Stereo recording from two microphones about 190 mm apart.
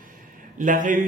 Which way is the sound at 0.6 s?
45° right (ahead or behind).